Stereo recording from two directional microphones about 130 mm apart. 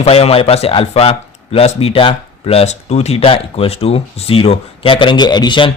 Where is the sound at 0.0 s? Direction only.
50° left (ahead or behind).